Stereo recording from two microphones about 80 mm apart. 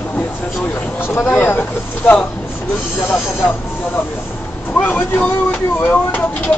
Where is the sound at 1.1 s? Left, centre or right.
Left.